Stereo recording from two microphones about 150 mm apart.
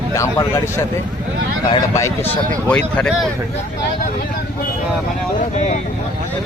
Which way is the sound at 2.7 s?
5° left (ahead or behind).